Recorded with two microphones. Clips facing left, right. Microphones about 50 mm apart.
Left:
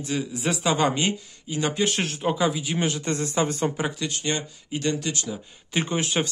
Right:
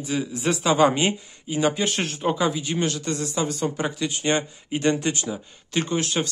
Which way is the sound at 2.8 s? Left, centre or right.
Left.